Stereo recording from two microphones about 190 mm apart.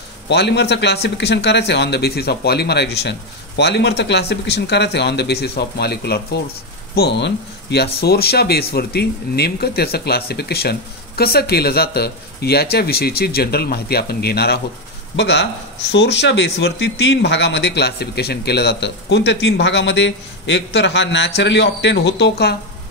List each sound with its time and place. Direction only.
0.3 s speech: 65° left (ahead or behind)